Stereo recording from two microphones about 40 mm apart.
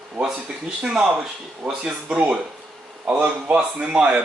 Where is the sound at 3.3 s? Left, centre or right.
Right.